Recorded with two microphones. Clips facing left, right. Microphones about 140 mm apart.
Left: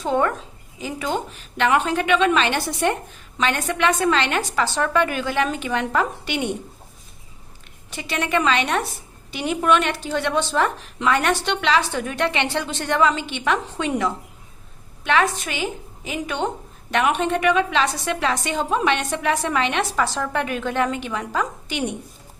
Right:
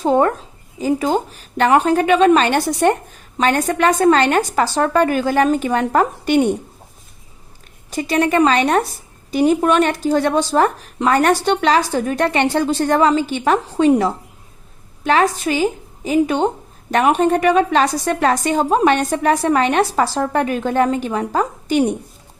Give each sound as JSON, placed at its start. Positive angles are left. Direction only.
{"t": 0.0, "sound": "a woman's voice", "side_deg": -35}
{"t": 7.9, "sound": "a woman's voice", "side_deg": -40}